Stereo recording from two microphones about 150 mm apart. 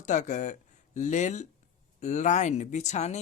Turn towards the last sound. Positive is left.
turn(degrees=50)  # may be behind; listen again after turning